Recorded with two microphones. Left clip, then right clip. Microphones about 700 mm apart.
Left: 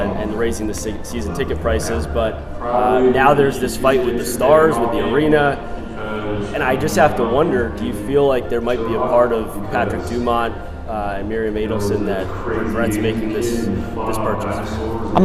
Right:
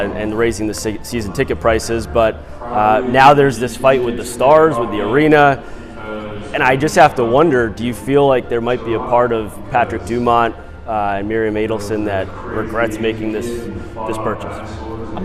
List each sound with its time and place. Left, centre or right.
0.2 s speech: right